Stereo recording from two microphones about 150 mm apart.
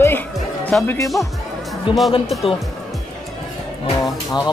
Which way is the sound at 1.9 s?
35° left (ahead or behind).